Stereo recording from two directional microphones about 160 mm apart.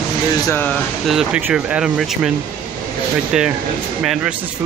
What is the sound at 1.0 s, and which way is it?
Speech, 5° right (ahead or behind).